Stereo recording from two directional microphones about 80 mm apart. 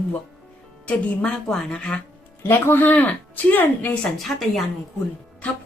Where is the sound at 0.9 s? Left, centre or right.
Centre.